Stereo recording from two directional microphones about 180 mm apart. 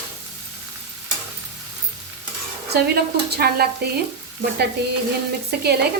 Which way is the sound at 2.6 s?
60° right (ahead or behind).